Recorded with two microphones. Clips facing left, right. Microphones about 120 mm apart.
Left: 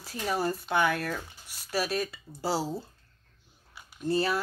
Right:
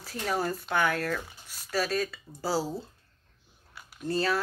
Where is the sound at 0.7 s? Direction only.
20° left (ahead or behind).